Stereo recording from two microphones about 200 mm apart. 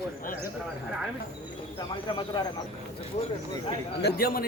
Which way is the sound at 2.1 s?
20° left (ahead or behind).